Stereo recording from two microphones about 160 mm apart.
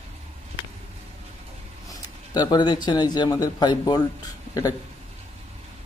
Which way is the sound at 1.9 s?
25° left (ahead or behind).